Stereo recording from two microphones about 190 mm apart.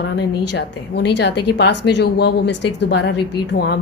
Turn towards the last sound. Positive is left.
turn(degrees=60)  # may be behind; listen again after turning